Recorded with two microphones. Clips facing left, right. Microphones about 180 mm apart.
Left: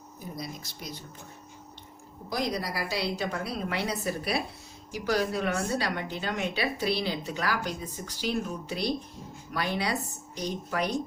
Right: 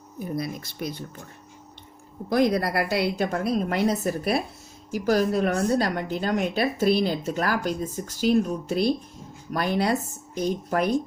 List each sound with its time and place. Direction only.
0.3 s speech: 60° right (ahead or behind)
2.3 s a woman's voice: 55° right (ahead or behind)